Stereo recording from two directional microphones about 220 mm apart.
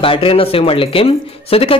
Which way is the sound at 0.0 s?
25° left (ahead or behind).